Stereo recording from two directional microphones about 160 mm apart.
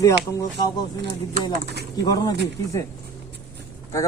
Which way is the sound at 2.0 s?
25° left (ahead or behind).